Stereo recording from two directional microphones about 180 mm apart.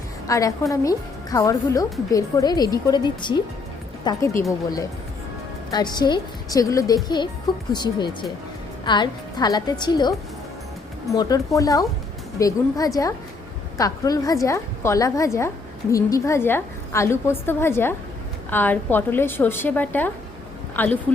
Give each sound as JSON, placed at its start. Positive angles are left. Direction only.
{"t": 0.3, "sound": "a woman's voice", "side_deg": 20}
{"t": 5.7, "sound": "a woman's voice", "side_deg": 25}